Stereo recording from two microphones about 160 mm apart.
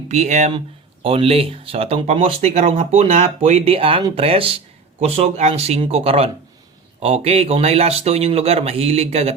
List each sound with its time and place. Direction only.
0.1 s speech: 45° right (ahead or behind)